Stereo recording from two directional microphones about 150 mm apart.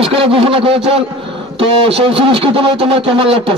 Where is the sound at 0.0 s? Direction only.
40° right (ahead or behind).